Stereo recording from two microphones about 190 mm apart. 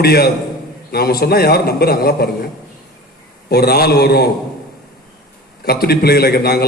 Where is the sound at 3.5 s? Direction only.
55° left (ahead or behind).